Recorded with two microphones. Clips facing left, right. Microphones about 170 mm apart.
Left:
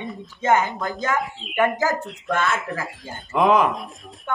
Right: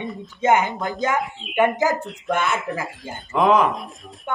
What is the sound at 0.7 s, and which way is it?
Speech, centre (ahead or behind).